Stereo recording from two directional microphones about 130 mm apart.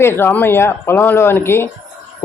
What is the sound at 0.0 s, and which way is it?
Speech, 20° left (ahead or behind).